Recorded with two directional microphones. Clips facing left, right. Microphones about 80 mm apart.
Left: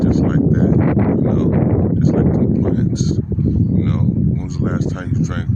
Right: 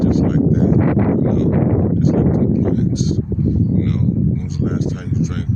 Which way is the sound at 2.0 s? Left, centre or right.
Left.